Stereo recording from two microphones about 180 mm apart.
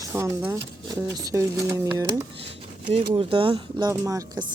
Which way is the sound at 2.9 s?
30° right (ahead or behind).